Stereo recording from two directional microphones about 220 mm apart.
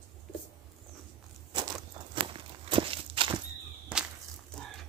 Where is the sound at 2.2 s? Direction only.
25° right (ahead or behind).